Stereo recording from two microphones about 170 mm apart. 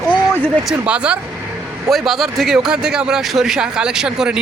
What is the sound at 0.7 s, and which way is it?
A man's voice, 5° right (ahead or behind).